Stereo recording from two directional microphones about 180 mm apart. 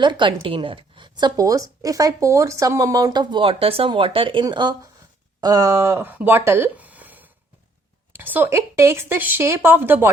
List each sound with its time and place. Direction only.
0.0 s speech: 25° right (ahead or behind)